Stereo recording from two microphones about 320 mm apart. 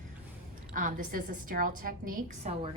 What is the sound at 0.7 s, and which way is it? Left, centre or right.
A woman's voice, right.